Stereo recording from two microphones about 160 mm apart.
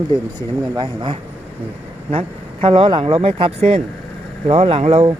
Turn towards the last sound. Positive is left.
turn(degrees=-40)  # may be behind; listen again after turning